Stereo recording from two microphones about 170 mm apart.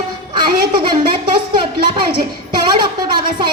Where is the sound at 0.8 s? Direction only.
25° right (ahead or behind).